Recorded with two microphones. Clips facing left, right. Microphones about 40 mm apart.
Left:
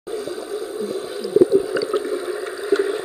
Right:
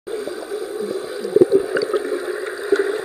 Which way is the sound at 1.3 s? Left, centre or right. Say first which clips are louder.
Right 1 dB; right.